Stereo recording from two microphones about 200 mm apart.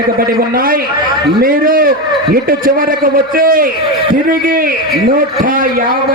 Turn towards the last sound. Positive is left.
turn(degrees=-45)  # may be behind; listen again after turning